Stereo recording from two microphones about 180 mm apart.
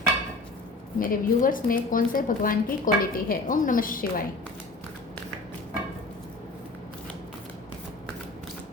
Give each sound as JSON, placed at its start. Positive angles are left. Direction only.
{"t": 0.9, "sound": "a woman's voice", "side_deg": 50}